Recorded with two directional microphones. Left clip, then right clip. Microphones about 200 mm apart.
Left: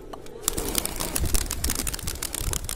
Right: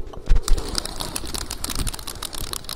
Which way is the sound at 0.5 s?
55° left (ahead or behind).